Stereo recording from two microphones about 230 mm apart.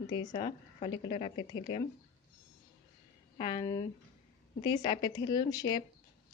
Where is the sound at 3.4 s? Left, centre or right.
Left.